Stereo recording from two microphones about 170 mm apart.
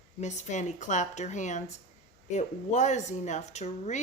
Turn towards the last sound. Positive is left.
turn(degrees=40)  # may be behind; listen again after turning